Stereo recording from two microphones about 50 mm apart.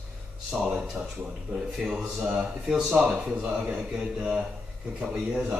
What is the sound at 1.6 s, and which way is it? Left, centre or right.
A man's voice, centre.